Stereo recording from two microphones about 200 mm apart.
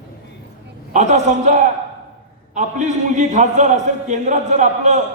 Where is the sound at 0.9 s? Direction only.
35° right (ahead or behind).